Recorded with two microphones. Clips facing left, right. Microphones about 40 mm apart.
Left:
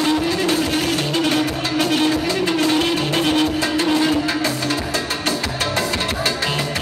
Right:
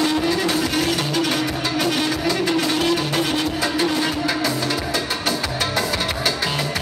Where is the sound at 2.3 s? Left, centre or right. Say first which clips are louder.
Left 1 dB; centre.